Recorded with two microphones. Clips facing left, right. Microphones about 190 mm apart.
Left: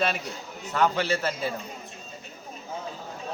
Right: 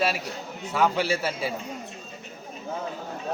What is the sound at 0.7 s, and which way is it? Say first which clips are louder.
Speech: right 1 dB; 10° right (ahead or behind).